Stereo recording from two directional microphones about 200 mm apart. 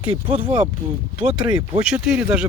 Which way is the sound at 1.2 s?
5° right (ahead or behind).